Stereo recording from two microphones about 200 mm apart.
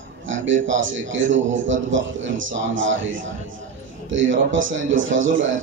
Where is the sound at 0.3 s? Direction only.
70° right (ahead or behind).